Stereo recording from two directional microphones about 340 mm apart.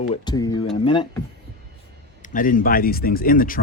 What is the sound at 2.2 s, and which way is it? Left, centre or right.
Speech, left.